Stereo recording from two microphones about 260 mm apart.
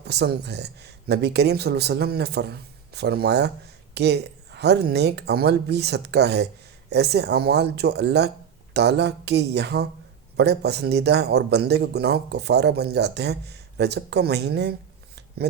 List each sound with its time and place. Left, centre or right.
0.0 s speech: right